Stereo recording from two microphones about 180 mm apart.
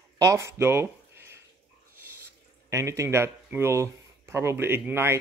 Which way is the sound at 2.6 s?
15° right (ahead or behind).